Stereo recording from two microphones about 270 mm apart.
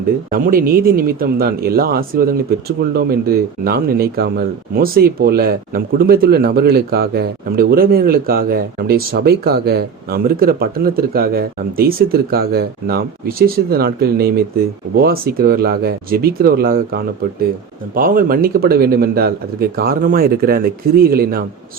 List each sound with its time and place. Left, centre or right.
0.3 s speech: right